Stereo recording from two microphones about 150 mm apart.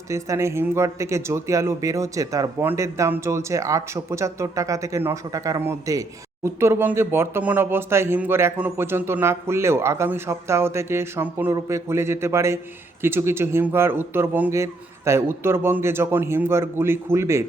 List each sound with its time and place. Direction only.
0.1 s speech: 20° right (ahead or behind)